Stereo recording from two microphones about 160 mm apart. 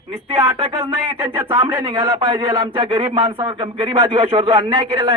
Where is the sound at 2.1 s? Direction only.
35° right (ahead or behind).